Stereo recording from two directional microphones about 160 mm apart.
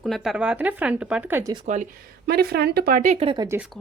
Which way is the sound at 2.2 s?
75° right (ahead or behind).